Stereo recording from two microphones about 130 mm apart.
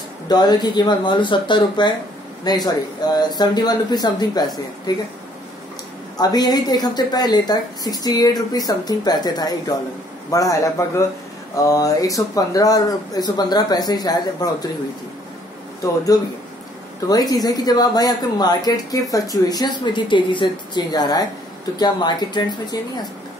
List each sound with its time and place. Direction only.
0.3 s speech: 35° left (ahead or behind)
6.1 s speech: 30° left (ahead or behind)
17.1 s speech: 30° left (ahead or behind)